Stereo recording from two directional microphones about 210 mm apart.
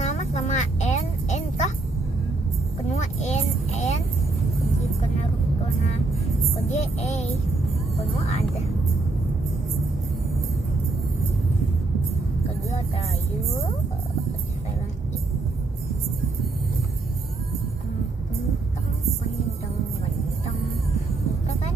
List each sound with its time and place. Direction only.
0.0 s music: 35° left (ahead or behind)
2.9 s vehicle: 35° left (ahead or behind)
6.7 s child singing: 30° left (ahead or behind)
8.3 s vehicle: 30° left (ahead or behind)